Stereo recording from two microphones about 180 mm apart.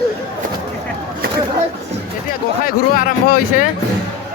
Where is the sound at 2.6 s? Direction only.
55° left (ahead or behind).